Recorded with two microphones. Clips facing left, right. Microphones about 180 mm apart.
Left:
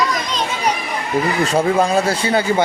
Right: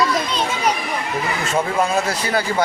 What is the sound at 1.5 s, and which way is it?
Speech, 30° left (ahead or behind).